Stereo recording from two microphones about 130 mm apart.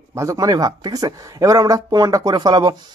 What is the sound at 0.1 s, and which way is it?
A man's voice, 25° right (ahead or behind).